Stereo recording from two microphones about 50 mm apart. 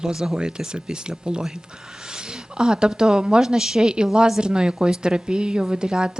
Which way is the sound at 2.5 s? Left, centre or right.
Centre.